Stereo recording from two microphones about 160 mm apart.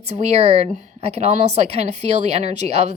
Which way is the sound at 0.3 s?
40° right (ahead or behind).